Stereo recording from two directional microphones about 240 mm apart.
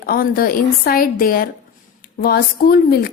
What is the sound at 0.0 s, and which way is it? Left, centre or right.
Speech, left.